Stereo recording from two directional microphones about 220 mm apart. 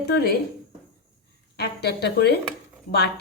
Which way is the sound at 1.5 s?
50° left (ahead or behind).